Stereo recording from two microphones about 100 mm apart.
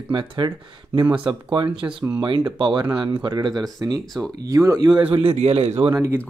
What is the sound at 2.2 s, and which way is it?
Speech, 50° right (ahead or behind).